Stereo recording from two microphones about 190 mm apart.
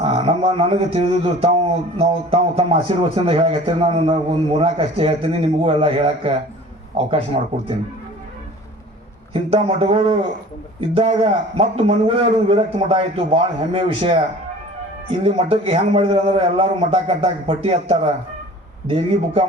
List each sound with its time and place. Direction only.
0.0 s a man's voice: 30° right (ahead or behind)
7.3 s a man's voice: 35° right (ahead or behind)
9.3 s a man's voice: 30° right (ahead or behind)